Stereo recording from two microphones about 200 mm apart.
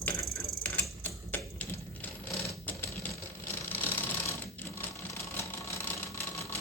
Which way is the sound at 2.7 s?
15° left (ahead or behind).